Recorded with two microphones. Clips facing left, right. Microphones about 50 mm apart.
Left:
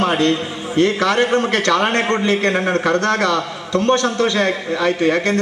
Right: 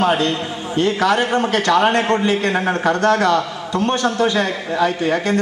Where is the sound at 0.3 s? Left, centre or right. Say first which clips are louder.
Left 3 dB; centre.